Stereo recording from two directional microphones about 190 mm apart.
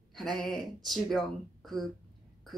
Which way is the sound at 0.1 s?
Centre (ahead or behind).